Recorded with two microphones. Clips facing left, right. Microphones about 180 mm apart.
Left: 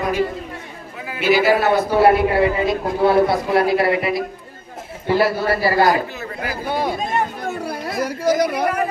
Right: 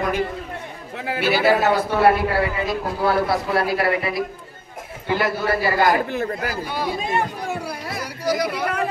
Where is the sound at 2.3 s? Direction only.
20° left (ahead or behind).